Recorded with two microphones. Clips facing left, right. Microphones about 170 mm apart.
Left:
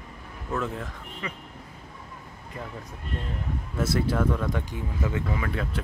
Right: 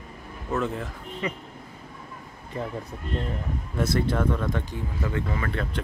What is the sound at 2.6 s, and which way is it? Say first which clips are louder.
Speech: right 7 dB; 20° right (ahead or behind).